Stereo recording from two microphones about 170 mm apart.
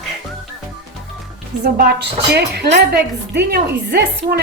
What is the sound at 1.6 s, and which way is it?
A woman's voice, 70° right (ahead or behind).